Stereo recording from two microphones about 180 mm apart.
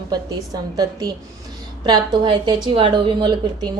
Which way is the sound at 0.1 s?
20° right (ahead or behind).